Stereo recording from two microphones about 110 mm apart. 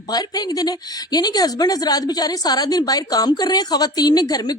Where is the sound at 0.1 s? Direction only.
35° left (ahead or behind).